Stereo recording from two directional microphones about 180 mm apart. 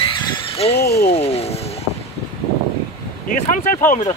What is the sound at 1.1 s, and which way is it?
Speech, 35° left (ahead or behind).